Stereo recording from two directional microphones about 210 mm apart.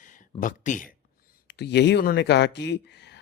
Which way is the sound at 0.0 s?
40° left (ahead or behind).